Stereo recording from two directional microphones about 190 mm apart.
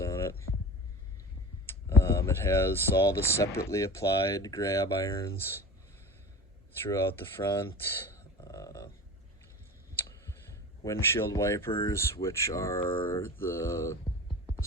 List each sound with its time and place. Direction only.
0.0 s a sound: 15° left (ahead or behind)
1.6 s a sound: 10° left (ahead or behind)
3.7 s speech: 15° left (ahead or behind)
6.9 s speech: 10° left (ahead or behind)
7.8 s gasp: 10° left (ahead or behind)
9.9 s clicking: 10° left (ahead or behind)
10.8 s speech: 15° left (ahead or behind)